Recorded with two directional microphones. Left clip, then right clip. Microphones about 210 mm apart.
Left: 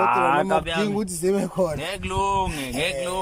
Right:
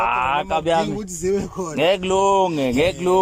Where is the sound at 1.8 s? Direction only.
35° right (ahead or behind).